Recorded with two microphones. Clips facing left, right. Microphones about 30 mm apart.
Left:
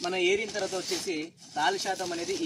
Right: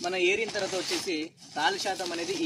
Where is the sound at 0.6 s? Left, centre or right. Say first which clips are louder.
Right 1 dB; right.